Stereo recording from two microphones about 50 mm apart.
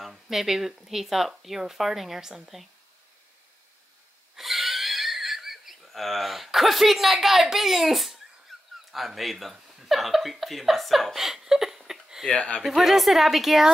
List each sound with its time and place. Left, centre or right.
0.0 s speech: centre
4.4 s wheeze: centre
8.5 s a sound: centre
8.9 s speech: centre
12.3 s speech: left
12.6 s speech: centre